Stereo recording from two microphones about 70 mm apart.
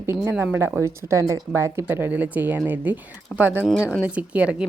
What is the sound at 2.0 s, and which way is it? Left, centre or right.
A woman's voice, right.